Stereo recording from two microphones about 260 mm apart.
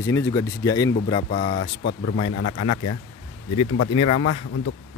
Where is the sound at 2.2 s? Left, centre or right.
Left.